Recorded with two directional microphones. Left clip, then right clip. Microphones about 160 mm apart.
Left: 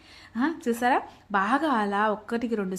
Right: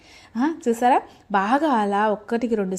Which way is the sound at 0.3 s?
25° right (ahead or behind).